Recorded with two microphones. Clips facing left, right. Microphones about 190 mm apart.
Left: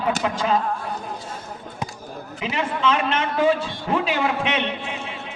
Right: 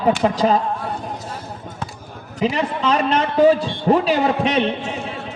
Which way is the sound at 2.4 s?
40° right (ahead or behind).